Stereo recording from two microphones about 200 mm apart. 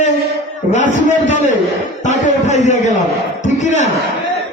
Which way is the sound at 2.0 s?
35° left (ahead or behind).